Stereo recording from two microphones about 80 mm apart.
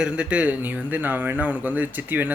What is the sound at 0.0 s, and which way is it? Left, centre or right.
A man's voice, centre.